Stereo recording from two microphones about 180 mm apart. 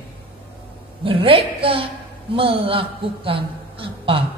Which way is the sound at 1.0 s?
30° right (ahead or behind).